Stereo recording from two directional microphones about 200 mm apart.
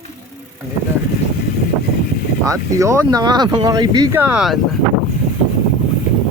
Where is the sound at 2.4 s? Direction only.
15° right (ahead or behind).